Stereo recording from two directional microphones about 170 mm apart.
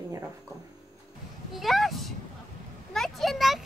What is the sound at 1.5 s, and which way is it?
Speech, centre (ahead or behind).